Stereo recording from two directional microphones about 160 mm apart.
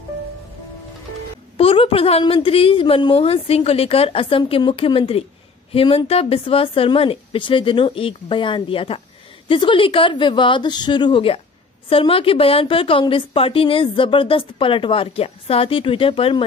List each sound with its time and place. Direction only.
1.6 s a woman's voice: 35° left (ahead or behind)